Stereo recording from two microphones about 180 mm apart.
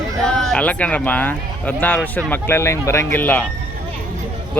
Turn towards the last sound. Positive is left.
turn(degrees=10)  # may be behind; listen again after turning